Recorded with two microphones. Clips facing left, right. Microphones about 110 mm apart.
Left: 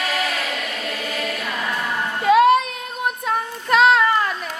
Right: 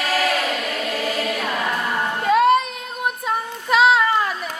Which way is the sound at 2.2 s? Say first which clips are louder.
Left 2 dB; centre (ahead or behind).